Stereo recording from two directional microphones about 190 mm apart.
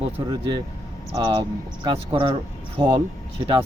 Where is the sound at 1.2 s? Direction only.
25° right (ahead or behind).